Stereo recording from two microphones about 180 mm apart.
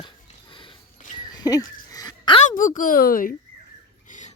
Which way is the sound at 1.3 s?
20° left (ahead or behind).